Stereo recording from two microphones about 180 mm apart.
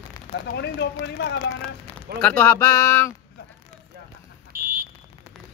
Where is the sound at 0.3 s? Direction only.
70° left (ahead or behind).